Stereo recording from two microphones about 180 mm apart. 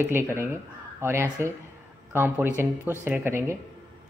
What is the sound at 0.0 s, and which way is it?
A woman's voice, 15° right (ahead or behind).